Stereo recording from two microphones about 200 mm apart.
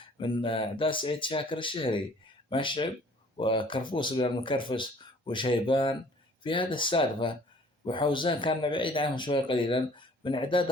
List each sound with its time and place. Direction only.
0.2 s speech: 25° left (ahead or behind)